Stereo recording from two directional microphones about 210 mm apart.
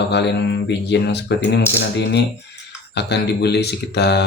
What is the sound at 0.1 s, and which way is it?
Speech, 55° left (ahead or behind).